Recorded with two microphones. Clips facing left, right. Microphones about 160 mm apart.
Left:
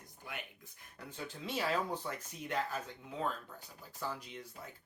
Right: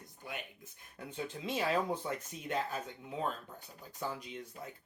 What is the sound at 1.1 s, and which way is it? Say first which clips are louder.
Speech: right 4 dB; 20° right (ahead or behind).